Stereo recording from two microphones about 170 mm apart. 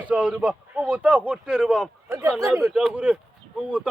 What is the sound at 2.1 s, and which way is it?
Speech, 15° right (ahead or behind).